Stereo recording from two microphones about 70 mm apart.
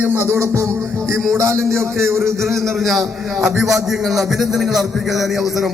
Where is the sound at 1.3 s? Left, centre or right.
Right.